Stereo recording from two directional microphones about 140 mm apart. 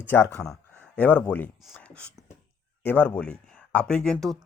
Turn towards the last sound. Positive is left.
turn(degrees=5)  # may be behind; listen again after turning